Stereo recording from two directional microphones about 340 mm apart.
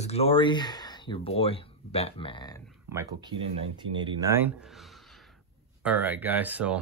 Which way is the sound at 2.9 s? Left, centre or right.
Centre.